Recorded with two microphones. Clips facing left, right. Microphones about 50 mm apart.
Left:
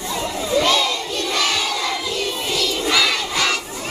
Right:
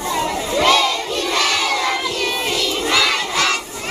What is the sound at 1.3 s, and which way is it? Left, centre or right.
Crowd, right.